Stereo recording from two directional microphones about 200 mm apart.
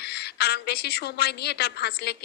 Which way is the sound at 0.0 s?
55° left (ahead or behind).